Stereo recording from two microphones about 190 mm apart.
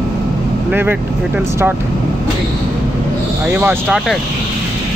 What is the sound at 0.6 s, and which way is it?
Speech, 10° right (ahead or behind).